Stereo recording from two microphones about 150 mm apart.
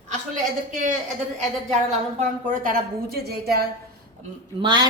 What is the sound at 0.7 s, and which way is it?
Speech, 60° right (ahead or behind).